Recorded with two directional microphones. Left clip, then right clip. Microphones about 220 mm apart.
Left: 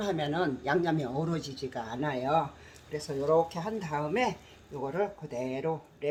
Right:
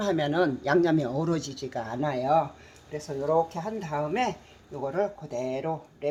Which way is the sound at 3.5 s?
20° right (ahead or behind).